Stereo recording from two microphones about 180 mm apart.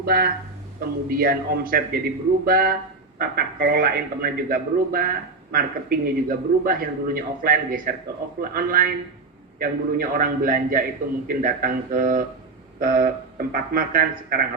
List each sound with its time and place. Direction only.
0.0 s a man's voice: 60° right (ahead or behind)